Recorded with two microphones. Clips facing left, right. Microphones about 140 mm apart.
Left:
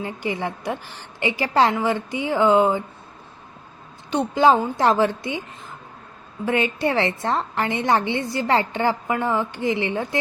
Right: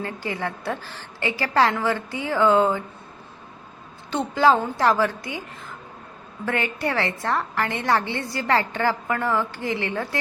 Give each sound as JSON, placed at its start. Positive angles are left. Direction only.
{"t": 0.0, "sound": "a woman's voice", "side_deg": 15}
{"t": 4.1, "sound": "a woman's voice", "side_deg": 15}